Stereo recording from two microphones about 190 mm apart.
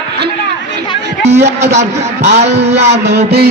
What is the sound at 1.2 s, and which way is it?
A man's voice, 35° right (ahead or behind).